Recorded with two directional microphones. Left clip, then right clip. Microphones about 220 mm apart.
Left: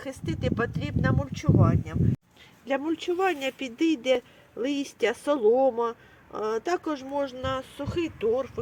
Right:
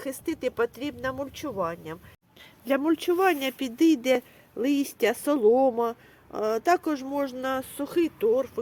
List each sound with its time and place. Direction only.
0.3 s speech: 35° right (ahead or behind)